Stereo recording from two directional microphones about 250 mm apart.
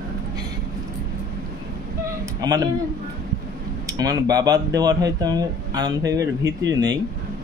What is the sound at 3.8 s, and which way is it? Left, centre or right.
Speech, centre.